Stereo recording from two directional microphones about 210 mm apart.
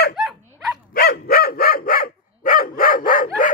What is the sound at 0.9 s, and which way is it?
Dog, 45° left (ahead or behind).